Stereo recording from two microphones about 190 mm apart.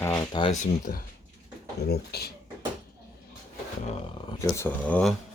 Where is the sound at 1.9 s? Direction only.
55° left (ahead or behind).